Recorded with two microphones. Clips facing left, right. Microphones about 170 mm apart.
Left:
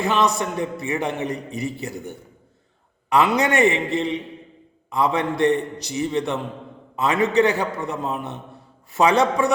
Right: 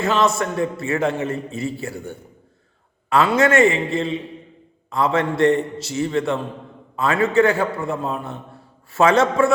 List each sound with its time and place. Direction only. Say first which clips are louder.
0.0 s a man's voice: right 2 dB; 15° left (ahead or behind)